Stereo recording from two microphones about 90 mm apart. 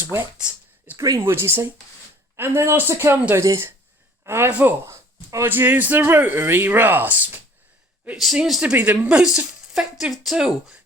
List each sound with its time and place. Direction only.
0.0 s speech: 25° right (ahead or behind)
0.3 s a sound: 10° right (ahead or behind)
0.9 s speech: 40° right (ahead or behind)
1.2 s speech: 25° right (ahead or behind)
4.9 s a sound: 35° right (ahead or behind)
5.5 s speech: 20° right (ahead or behind)
8.1 s a woman's voice: 5° right (ahead or behind)